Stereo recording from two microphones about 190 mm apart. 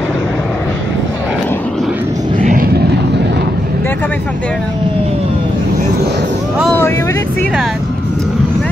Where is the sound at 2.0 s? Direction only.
15° right (ahead or behind).